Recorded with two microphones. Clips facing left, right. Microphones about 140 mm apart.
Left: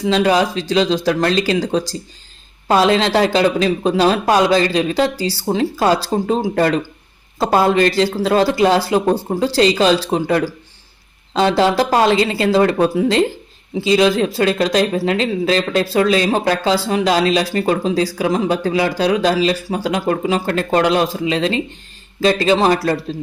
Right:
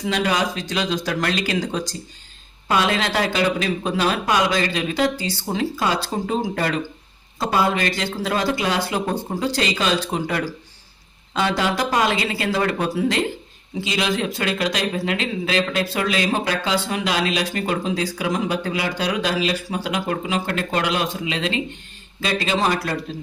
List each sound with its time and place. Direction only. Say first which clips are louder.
0.0 s speech: left 7 dB; 30° left (ahead or behind)